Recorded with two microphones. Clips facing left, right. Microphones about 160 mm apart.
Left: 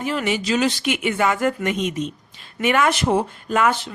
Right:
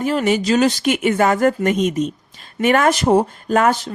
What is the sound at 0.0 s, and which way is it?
A woman's voice, 40° right (ahead or behind).